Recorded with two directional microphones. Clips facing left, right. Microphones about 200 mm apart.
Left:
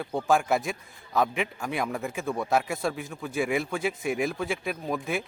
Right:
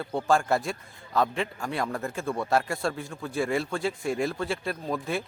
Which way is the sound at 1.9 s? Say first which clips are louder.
Even; centre (ahead or behind).